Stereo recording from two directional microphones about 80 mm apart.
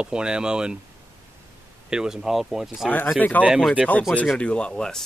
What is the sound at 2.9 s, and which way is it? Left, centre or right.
Speech, left.